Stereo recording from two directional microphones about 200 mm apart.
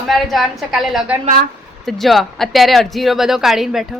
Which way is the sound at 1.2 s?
45° right (ahead or behind).